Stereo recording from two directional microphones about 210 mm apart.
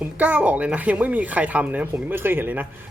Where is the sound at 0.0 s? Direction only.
5° right (ahead or behind).